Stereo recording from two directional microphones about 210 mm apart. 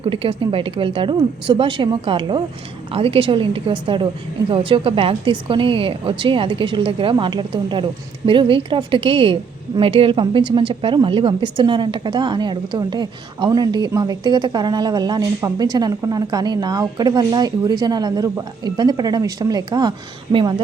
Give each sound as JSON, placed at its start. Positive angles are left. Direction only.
{"t": 0.0, "sound": "a woman's voice", "side_deg": -25}